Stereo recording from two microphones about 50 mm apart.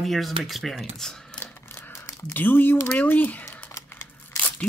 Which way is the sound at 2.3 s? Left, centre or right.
Left.